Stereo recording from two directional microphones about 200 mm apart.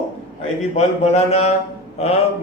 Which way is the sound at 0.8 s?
30° left (ahead or behind).